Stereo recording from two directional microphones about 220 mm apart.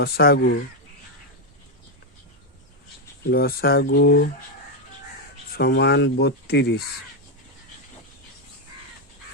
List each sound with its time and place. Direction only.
0.0 s speech: 45° left (ahead or behind)
3.2 s speech: 45° left (ahead or behind)
5.5 s speech: 50° left (ahead or behind)